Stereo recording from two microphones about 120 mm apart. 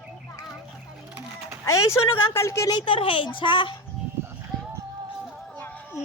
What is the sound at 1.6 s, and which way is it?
Speech, 25° left (ahead or behind).